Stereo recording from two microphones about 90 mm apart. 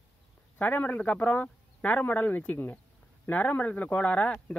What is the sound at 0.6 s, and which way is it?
Speech, 15° left (ahead or behind).